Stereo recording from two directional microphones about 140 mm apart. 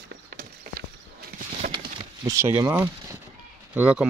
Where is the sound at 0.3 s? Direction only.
90° right.